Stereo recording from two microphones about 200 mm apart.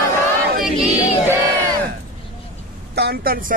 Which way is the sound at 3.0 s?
50° right (ahead or behind).